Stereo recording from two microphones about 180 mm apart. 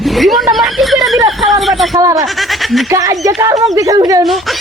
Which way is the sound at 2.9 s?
20° right (ahead or behind).